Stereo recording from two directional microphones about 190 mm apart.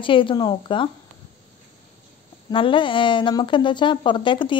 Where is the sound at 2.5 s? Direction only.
25° left (ahead or behind).